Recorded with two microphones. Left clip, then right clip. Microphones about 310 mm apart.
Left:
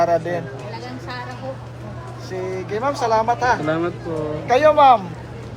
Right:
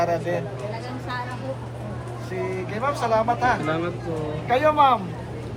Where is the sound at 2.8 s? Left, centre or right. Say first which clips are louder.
Left 3 dB; left.